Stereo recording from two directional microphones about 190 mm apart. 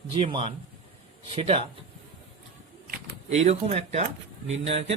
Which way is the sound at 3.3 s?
35° right (ahead or behind).